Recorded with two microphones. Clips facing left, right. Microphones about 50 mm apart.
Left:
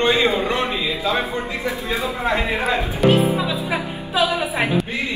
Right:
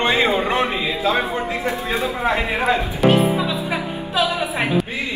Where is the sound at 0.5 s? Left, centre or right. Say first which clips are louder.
Right 2 dB; right.